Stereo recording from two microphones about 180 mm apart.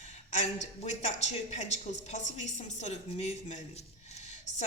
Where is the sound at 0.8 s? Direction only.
40° left (ahead or behind).